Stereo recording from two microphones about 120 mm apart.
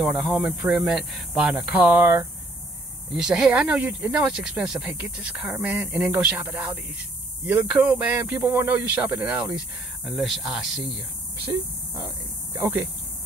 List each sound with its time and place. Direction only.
0.0 s speech: centre (ahead or behind)
3.2 s speech: 5° right (ahead or behind)
11.4 s speech: 15° right (ahead or behind)